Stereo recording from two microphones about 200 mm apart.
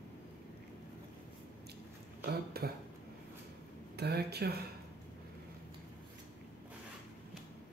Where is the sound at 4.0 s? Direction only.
55° right (ahead or behind).